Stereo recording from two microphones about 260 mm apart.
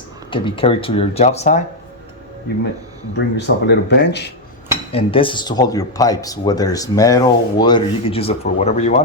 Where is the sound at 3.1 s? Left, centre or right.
Left.